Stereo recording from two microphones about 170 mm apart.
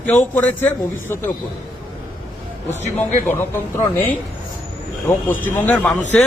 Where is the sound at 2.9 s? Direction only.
10° left (ahead or behind).